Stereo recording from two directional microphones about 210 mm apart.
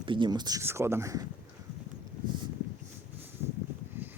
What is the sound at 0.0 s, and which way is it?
Speech, 20° right (ahead or behind).